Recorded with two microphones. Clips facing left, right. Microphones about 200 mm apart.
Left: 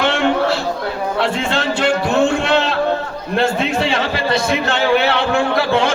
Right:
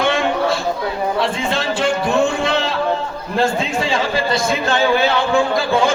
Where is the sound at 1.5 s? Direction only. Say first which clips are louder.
Left 1 dB; 70° left (ahead or behind).